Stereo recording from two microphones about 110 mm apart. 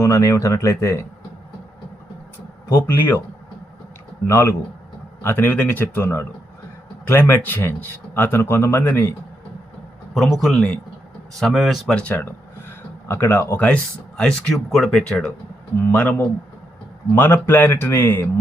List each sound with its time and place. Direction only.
0.0 s speech: 30° left (ahead or behind)
2.7 s speech: 20° left (ahead or behind)
4.3 s speech: 25° left (ahead or behind)
10.2 s a man's voice: 5° left (ahead or behind)
11.9 s speech: 15° left (ahead or behind)